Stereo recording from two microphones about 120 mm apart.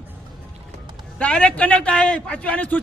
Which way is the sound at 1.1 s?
10° left (ahead or behind).